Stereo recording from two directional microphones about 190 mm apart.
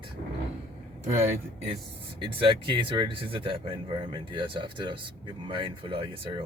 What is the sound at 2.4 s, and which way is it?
Speech, 25° right (ahead or behind).